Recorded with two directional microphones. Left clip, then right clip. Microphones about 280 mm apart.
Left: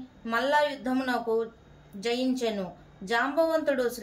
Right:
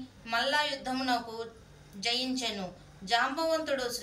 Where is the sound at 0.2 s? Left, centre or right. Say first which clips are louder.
Left 4 dB; left.